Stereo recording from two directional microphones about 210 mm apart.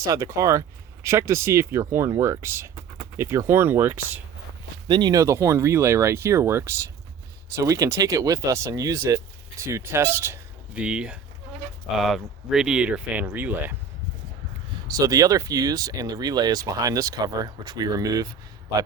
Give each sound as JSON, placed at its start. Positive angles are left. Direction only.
{"t": 0.0, "sound": "speech", "side_deg": -15}
{"t": 4.9, "sound": "speech", "side_deg": -20}
{"t": 14.8, "sound": "speech", "side_deg": -15}